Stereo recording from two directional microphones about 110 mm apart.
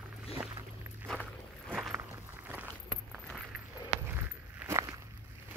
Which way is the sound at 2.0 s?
15° right (ahead or behind).